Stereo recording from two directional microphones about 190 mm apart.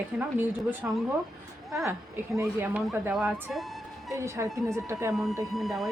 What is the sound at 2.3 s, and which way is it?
A woman's voice, 10° right (ahead or behind).